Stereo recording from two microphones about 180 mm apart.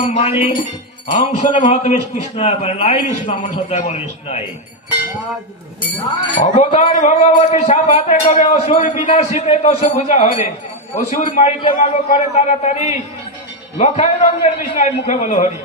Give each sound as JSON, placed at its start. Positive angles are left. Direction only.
{"t": 0.1, "sound": "a man's voice", "side_deg": 35}
{"t": 1.1, "sound": "music", "side_deg": 45}
{"t": 1.6, "sound": "a man's voice", "side_deg": 35}
{"t": 6.4, "sound": "a man's voice", "side_deg": 40}